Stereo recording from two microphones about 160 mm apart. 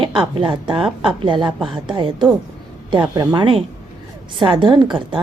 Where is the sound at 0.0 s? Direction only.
30° right (ahead or behind).